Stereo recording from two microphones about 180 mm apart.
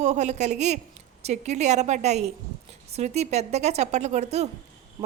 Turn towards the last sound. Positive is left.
turn(degrees=-40)  # may be behind; listen again after turning